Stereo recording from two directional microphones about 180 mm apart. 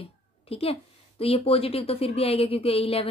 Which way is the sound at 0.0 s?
30° left (ahead or behind).